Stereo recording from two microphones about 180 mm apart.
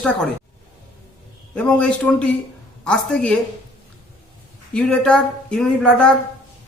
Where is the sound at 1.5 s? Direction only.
5° left (ahead or behind).